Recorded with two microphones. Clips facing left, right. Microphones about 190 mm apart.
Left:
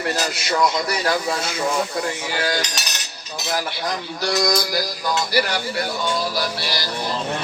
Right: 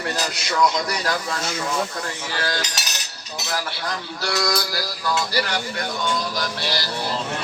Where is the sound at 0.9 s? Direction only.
5° left (ahead or behind).